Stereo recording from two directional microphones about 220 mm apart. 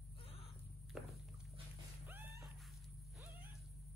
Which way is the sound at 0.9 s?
Centre (ahead or behind).